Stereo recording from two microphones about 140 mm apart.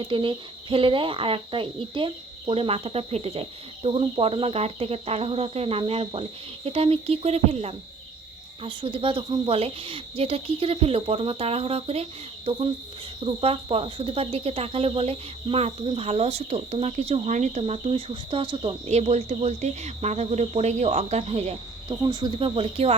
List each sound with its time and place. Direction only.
0.0 s speech: 35° right (ahead or behind)
13.2 s speech: 40° right (ahead or behind)
21.8 s speech: 30° right (ahead or behind)
22.4 s speech: 40° right (ahead or behind)